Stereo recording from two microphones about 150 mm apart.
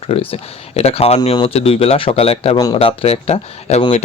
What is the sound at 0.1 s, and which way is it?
Speech, 45° left (ahead or behind).